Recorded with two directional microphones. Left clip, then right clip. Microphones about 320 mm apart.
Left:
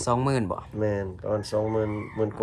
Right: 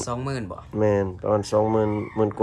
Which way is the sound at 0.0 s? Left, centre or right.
Centre.